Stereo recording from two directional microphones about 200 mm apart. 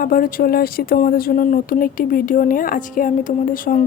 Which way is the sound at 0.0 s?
45° left (ahead or behind).